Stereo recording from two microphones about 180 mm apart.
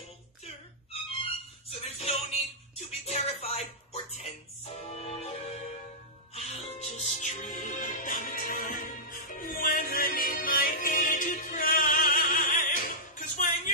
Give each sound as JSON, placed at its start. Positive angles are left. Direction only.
{"t": 2.0, "sound": "music", "side_deg": 35}